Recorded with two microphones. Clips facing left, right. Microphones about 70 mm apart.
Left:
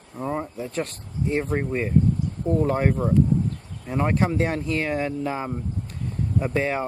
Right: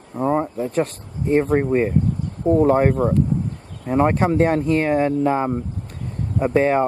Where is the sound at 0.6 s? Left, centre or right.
Centre.